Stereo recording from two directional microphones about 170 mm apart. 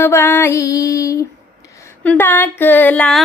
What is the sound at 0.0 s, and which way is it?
Female singing, 15° left (ahead or behind).